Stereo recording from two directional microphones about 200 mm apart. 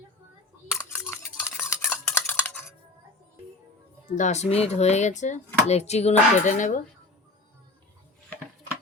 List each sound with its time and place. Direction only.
1.4 s stir: 10° left (ahead or behind)
4.0 s speech: 40° left (ahead or behind)